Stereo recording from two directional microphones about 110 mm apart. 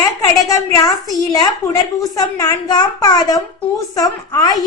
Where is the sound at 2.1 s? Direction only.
35° left (ahead or behind).